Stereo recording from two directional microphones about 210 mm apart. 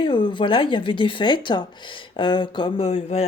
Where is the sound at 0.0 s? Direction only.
25° left (ahead or behind).